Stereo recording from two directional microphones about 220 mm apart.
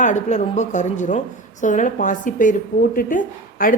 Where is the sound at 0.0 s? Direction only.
35° left (ahead or behind).